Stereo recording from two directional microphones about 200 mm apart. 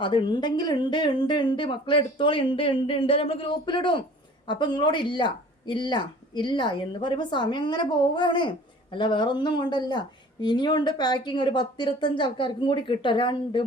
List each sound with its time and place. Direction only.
0.0 s speech: 25° left (ahead or behind)